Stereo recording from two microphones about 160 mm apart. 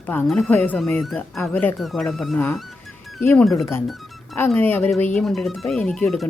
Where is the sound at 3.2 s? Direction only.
15° left (ahead or behind).